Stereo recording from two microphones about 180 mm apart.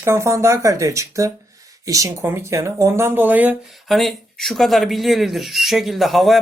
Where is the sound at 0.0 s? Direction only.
15° right (ahead or behind).